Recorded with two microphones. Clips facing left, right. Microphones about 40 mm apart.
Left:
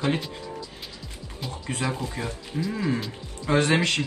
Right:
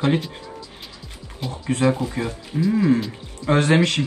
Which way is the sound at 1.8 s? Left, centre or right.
Right.